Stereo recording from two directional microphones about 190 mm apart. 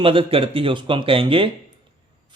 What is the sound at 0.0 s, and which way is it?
Speech, 30° right (ahead or behind).